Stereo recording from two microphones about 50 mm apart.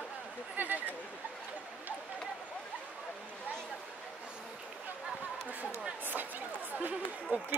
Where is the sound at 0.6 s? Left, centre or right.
Right.